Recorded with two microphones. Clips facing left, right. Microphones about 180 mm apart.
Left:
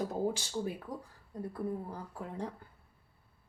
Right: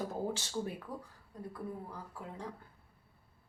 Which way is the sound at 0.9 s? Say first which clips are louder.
Left 2 dB; 40° left (ahead or behind).